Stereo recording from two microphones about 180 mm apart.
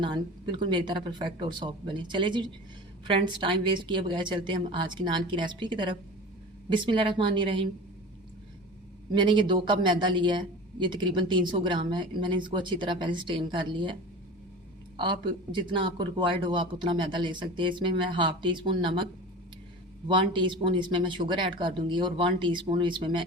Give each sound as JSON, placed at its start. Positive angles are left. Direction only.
{"t": 0.0, "sound": "speech", "side_deg": -25}
{"t": 9.1, "sound": "speech", "side_deg": -25}
{"t": 14.9, "sound": "speech", "side_deg": -25}
{"t": 20.1, "sound": "speech", "side_deg": -25}